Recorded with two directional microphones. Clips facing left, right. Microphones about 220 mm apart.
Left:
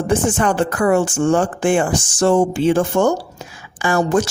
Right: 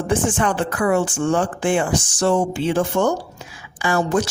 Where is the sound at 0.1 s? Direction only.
40° left (ahead or behind).